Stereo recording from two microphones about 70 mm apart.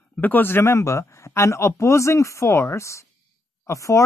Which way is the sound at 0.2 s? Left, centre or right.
Left.